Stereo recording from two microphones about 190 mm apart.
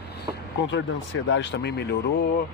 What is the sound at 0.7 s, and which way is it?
Speech, 80° left.